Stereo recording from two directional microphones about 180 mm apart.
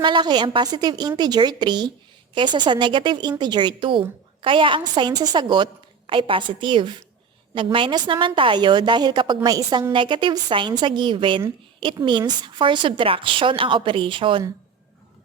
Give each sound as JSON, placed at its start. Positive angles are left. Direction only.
{"t": 0.0, "sound": "a woman's voice", "side_deg": -25}